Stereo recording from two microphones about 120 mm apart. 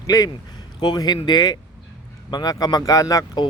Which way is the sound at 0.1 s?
30° left (ahead or behind).